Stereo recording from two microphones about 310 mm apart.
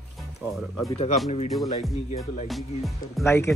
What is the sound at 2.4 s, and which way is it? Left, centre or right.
Music, centre.